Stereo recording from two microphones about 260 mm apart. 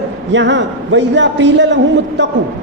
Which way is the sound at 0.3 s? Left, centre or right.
Right.